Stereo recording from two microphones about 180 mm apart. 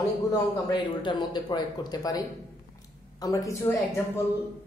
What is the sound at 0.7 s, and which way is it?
A woman's voice, 25° left (ahead or behind).